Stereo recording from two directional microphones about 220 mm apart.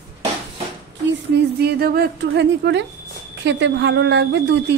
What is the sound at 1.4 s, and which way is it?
A woman's voice, 45° right (ahead or behind).